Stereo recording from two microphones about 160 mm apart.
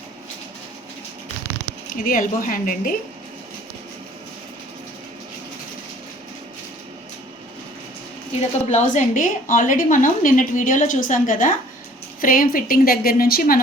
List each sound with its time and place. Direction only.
1.9 s a woman's voice: 60° left (ahead or behind)
8.4 s a woman's voice: 50° left (ahead or behind); by 13.6 s 65° left (ahead or behind)